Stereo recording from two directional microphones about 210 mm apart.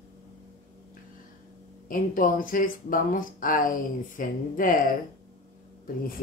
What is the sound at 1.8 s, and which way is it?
Speech, 40° left (ahead or behind).